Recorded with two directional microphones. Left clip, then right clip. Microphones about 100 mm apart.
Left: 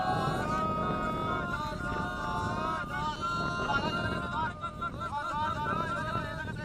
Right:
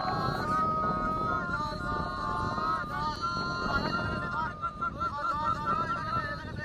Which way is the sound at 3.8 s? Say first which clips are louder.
Right 1 dB; 25° left (ahead or behind).